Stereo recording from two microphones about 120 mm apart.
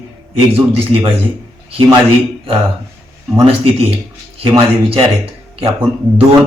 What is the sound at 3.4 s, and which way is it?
Speech, 55° right (ahead or behind).